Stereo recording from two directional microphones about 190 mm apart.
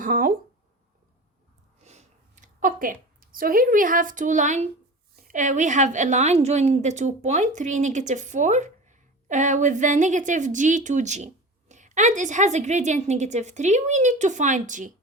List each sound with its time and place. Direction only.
0.0 s speech: 45° right (ahead or behind)
1.8 s a sound: 35° right (ahead or behind)
5.2 s a woman's voice: 40° right (ahead or behind)